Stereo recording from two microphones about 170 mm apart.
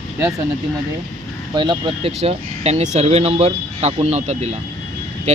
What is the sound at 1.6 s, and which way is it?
Speech, 30° right (ahead or behind).